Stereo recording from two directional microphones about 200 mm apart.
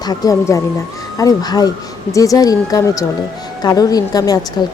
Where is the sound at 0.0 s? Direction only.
20° left (ahead or behind).